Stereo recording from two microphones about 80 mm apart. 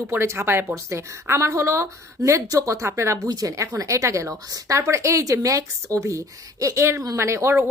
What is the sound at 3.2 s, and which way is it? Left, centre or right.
A woman's voice, right.